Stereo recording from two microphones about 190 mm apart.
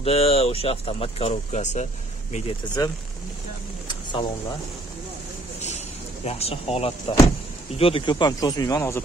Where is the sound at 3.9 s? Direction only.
25° left (ahead or behind).